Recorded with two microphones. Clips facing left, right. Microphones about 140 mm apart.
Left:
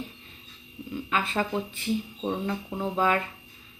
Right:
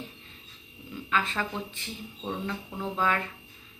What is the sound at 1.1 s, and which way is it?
Speech, 15° left (ahead or behind).